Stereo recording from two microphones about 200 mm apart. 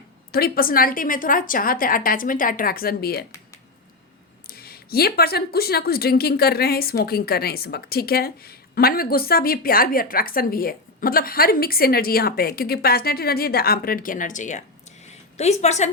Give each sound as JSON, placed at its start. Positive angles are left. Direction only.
{"t": 0.3, "sound": "speech", "side_deg": 50}
{"t": 4.4, "sound": "a woman's voice", "side_deg": 50}